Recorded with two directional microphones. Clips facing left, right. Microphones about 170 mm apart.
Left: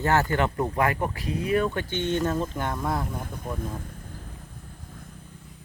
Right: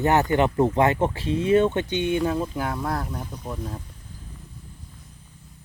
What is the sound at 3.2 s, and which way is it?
Speech, 50° left (ahead or behind).